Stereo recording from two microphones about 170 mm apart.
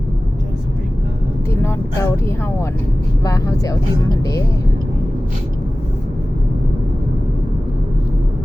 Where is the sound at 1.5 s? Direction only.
15° left (ahead or behind).